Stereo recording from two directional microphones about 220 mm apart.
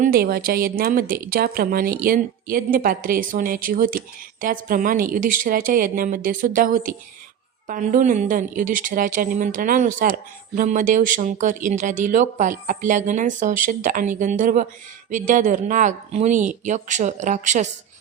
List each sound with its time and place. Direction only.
0.0 s a woman's voice: 45° right (ahead or behind)